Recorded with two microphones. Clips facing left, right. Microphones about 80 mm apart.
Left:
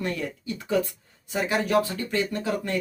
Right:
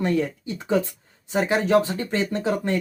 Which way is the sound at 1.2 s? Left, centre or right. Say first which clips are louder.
Right 4 dB; right.